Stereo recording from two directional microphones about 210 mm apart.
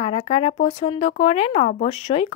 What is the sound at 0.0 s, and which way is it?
Speech, 30° left (ahead or behind).